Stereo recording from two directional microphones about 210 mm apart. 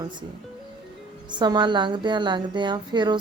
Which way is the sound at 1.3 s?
20° right (ahead or behind).